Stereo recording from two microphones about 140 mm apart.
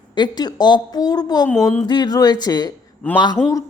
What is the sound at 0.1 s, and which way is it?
A woman's voice, 30° left (ahead or behind).